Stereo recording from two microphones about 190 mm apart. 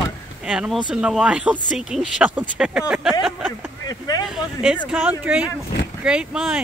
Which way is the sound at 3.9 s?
20° left (ahead or behind).